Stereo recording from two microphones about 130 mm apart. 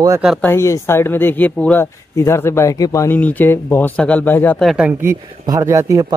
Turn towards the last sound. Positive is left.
turn(degrees=-25)  # may be behind; listen again after turning